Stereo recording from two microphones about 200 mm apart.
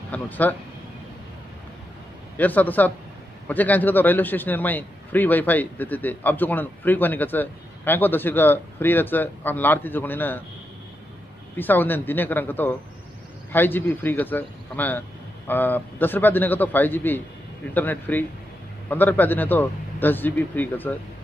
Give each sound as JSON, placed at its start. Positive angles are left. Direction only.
{"t": 0.1, "sound": "a man's voice", "side_deg": 10}
{"t": 2.3, "sound": "a man's voice", "side_deg": 10}
{"t": 11.5, "sound": "a man's voice", "side_deg": 10}